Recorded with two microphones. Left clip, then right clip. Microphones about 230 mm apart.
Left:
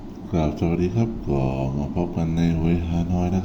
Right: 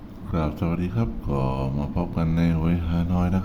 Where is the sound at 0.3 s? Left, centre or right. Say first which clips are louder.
Left 4 dB; centre.